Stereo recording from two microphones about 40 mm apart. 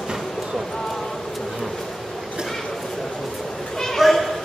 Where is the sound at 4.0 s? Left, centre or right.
Centre.